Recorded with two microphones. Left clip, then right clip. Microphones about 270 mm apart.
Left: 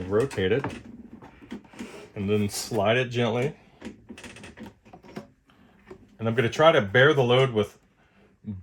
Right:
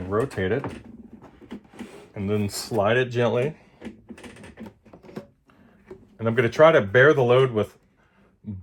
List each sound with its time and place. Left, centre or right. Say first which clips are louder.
0.1 s speech: left 1 dB; centre
1.2 s a sound: even; centre
2.1 s speech: even; centre
6.2 s speech: right 3 dB; centre